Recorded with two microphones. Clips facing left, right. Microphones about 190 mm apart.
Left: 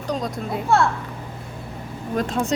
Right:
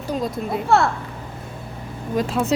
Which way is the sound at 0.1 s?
Centre (ahead or behind).